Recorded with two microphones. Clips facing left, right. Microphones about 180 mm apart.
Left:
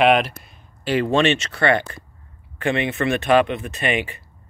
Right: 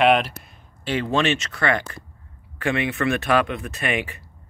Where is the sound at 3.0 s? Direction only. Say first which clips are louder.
Left 5 dB; 20° left (ahead or behind).